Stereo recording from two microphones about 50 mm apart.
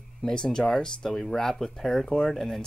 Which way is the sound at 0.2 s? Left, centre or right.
Centre.